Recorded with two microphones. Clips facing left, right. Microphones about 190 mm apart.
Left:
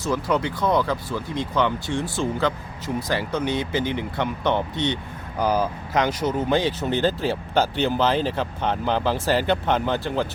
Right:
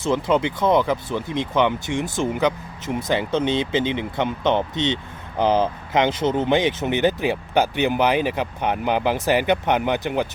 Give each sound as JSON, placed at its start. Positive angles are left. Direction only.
{"t": 0.0, "sound": "speech", "side_deg": -25}